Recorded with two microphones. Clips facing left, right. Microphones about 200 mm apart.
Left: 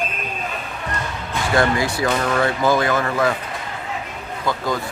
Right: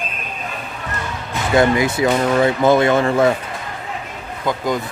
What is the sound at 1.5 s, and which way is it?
Speech, 20° right (ahead or behind).